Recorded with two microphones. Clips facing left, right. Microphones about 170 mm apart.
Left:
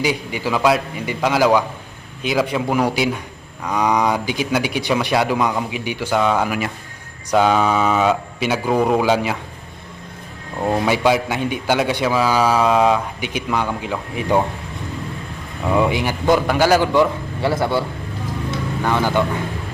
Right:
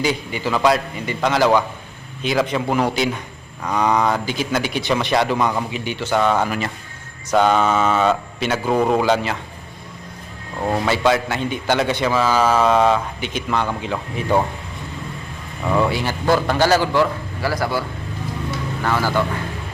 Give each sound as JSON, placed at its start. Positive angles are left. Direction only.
{"t": 0.0, "sound": "a man's voice", "side_deg": 10}
{"t": 10.6, "sound": "a man's voice", "side_deg": 5}
{"t": 15.6, "sound": "a man's voice", "side_deg": 10}